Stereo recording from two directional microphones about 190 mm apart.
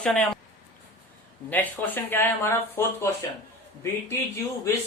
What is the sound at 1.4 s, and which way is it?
Speech, 10° left (ahead or behind).